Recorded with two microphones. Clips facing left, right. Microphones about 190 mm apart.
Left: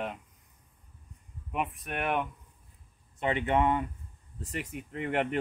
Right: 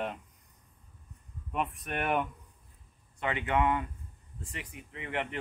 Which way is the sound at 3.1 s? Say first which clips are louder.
Left 3 dB; 25° left (ahead or behind).